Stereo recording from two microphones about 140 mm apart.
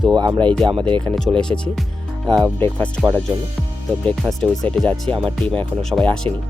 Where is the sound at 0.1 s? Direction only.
30° right (ahead or behind).